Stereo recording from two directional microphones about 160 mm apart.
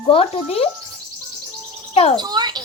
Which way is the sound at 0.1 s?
35° left (ahead or behind).